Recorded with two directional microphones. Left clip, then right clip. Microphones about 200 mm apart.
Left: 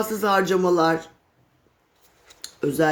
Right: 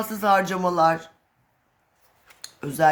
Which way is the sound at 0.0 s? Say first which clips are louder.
Even; 30° right (ahead or behind).